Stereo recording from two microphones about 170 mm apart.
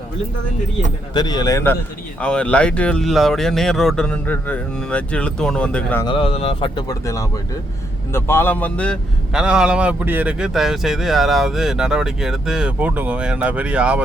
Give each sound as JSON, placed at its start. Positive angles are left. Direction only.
{"t": 1.1, "sound": "speech", "side_deg": 25}
{"t": 6.1, "sound": "speech", "side_deg": 30}
{"t": 9.3, "sound": "speech", "side_deg": -5}